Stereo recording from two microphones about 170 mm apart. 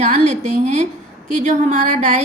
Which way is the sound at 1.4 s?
45° right (ahead or behind).